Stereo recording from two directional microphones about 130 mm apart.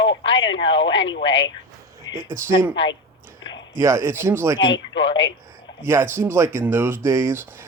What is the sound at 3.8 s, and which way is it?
Speech, 20° right (ahead or behind).